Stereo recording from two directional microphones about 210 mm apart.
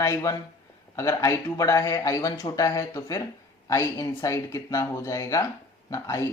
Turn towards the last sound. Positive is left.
turn(degrees=15)  # may be behind; listen again after turning